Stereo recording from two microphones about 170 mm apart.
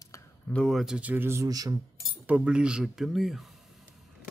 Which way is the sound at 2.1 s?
5° right (ahead or behind).